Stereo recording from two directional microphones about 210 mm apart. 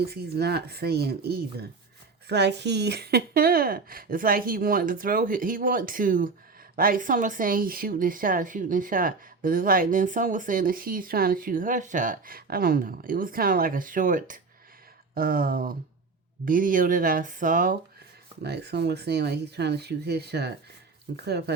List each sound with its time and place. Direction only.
0.0 s a woman's voice: 50° right (ahead or behind)
18.4 s a woman's voice: 50° right (ahead or behind)